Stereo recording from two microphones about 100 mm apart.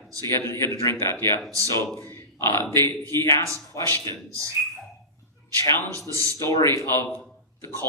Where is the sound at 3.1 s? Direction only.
30° left (ahead or behind).